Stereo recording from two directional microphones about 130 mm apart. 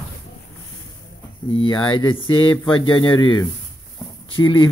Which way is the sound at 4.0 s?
35° left (ahead or behind).